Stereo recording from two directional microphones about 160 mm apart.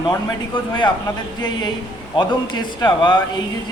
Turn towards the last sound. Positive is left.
turn(degrees=25)  # may be behind; listen again after turning